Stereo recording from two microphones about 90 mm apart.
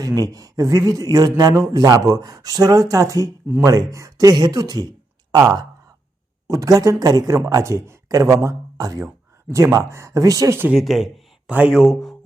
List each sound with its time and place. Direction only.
0.0 s speech: 40° right (ahead or behind)
10.8 s speech: centre (ahead or behind)
11.4 s speech: 15° right (ahead or behind)
11.8 s speech: centre (ahead or behind)